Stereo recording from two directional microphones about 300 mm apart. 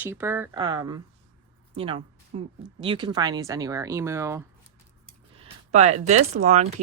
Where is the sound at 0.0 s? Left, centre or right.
Centre.